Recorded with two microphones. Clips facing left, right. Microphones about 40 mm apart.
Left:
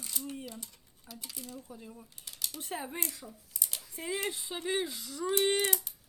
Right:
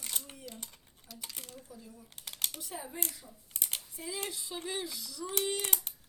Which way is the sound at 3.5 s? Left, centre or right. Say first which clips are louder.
Right 3 dB; right.